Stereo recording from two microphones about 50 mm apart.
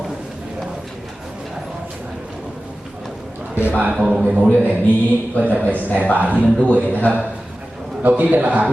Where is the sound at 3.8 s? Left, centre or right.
Right.